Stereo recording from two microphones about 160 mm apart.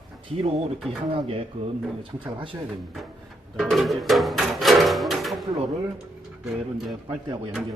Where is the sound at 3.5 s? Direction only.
Centre (ahead or behind).